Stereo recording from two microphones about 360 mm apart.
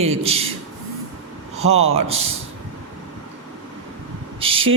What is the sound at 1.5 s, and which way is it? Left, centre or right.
Speech, centre.